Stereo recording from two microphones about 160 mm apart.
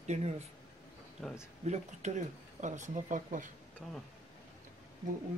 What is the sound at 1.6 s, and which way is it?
Speech, 45° right (ahead or behind).